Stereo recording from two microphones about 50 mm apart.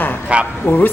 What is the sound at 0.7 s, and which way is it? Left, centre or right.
Speech, left.